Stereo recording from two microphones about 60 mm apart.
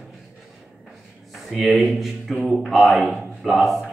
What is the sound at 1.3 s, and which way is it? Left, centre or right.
A man's voice, centre.